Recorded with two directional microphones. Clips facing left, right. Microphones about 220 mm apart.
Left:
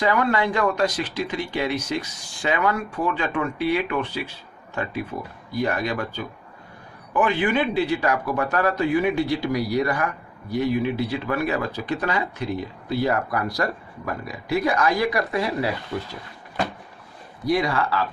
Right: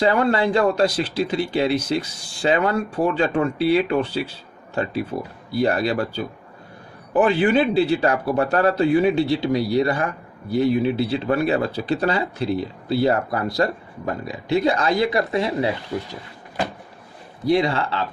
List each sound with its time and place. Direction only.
0.0 s speech: 30° right (ahead or behind)
17.4 s speech: 25° right (ahead or behind)